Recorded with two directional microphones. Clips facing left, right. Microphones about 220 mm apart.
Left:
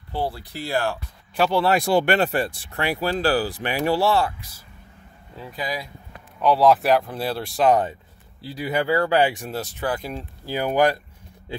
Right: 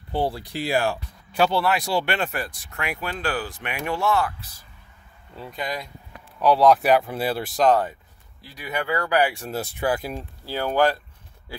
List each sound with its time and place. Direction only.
0.1 s speech: 15° right (ahead or behind)
1.8 s speech: 50° left (ahead or behind); by 4.3 s 35° left (ahead or behind)
5.3 s speech: centre (ahead or behind)
8.4 s speech: 30° left (ahead or behind)
9.5 s speech: 10° right (ahead or behind)
10.4 s speech: 15° left (ahead or behind)